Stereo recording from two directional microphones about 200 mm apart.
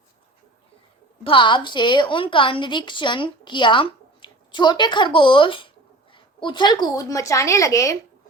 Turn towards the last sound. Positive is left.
turn(degrees=15)  # may be behind; listen again after turning